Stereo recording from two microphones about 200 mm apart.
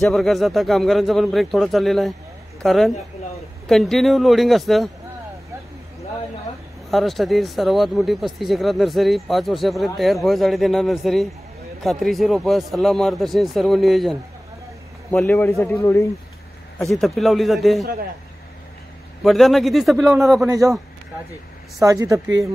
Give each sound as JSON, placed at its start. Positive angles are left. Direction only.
{"t": 0.0, "sound": "speech", "side_deg": 0}
{"t": 6.9, "sound": "a man's voice", "side_deg": 0}
{"t": 19.2, "sound": "speech", "side_deg": 0}
{"t": 20.4, "sound": "speech", "side_deg": -15}
{"t": 21.7, "sound": "speech", "side_deg": -15}